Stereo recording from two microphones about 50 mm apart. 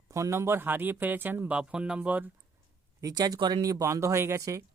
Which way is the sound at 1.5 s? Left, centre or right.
Centre.